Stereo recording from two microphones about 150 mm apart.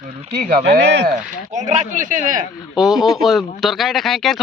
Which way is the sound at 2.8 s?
Centre (ahead or behind).